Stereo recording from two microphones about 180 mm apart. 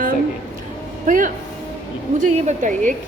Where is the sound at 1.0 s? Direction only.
50° right (ahead or behind).